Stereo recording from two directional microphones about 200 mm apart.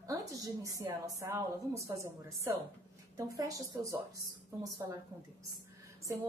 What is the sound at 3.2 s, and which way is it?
Speech, 15° right (ahead or behind).